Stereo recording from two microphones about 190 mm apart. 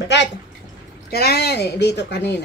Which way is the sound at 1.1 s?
55° left (ahead or behind).